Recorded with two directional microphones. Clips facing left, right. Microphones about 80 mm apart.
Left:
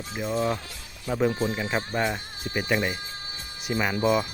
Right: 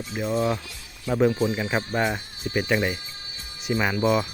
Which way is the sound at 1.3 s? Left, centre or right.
Left.